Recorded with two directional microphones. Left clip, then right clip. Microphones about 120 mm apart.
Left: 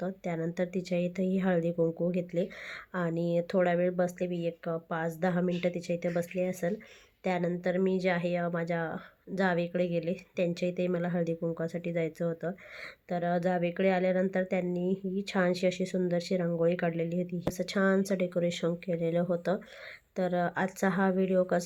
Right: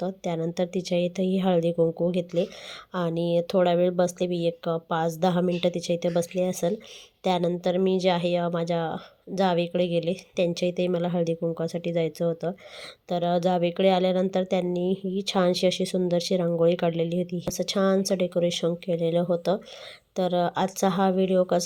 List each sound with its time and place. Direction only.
0.0 s speech: 20° right (ahead or behind)